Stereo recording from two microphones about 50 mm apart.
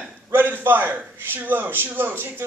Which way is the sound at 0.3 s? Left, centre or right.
Right.